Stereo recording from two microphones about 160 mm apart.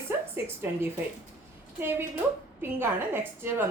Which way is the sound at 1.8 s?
15° right (ahead or behind).